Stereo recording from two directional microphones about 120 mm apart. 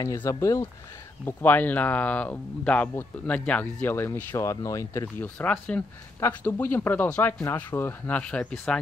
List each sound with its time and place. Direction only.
0.0 s speech: 25° left (ahead or behind)
1.2 s speech: 15° left (ahead or behind)
5.4 s speech: 10° left (ahead or behind)